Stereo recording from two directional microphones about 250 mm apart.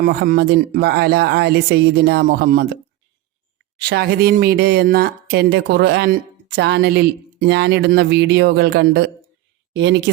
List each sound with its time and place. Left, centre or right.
0.0 s speech: right
3.8 s speech: right